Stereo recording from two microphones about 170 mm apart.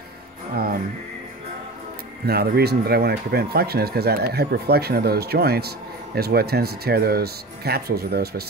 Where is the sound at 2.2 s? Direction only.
65° right (ahead or behind).